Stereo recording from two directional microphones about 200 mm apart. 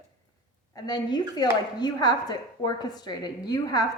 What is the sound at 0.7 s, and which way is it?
Speech, 20° left (ahead or behind).